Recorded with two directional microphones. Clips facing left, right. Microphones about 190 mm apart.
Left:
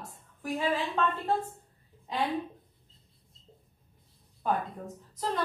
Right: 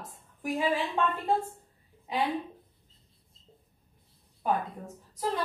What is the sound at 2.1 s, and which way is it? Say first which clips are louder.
Speech: right 2 dB; 10° right (ahead or behind).